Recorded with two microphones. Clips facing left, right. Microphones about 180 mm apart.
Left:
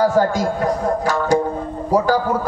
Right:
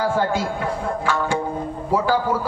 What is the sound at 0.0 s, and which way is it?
A man's voice, 40° left (ahead or behind).